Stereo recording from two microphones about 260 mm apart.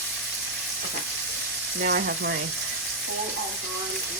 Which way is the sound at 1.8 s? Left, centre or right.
Right.